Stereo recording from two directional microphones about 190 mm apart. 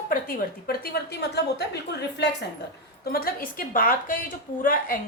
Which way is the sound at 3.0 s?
55° left (ahead or behind).